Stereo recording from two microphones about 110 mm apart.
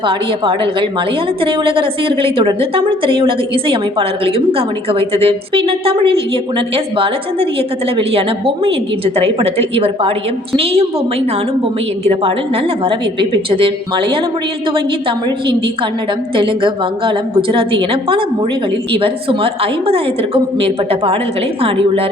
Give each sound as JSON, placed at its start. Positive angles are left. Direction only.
{"t": 0.0, "sound": "a woman's voice", "side_deg": -50}
{"t": 12.0, "sound": "a woman's voice", "side_deg": -60}